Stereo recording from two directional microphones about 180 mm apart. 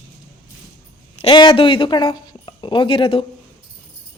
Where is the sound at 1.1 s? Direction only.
30° left (ahead or behind).